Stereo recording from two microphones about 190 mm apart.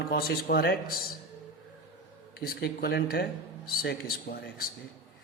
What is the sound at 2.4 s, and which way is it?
Speech, 55° left (ahead or behind).